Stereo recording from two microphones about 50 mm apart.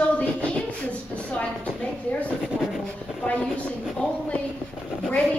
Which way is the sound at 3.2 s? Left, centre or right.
Left.